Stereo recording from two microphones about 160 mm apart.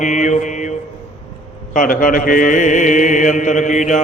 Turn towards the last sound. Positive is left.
turn(degrees=50)  # may be behind; listen again after turning